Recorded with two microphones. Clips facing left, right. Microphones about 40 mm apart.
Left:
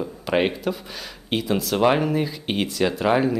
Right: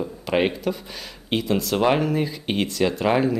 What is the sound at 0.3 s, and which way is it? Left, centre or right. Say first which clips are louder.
Speech: even; centre.